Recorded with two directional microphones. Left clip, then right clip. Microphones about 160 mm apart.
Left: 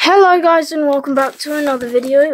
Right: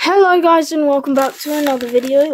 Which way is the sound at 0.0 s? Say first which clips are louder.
Left 2 dB; 10° left (ahead or behind).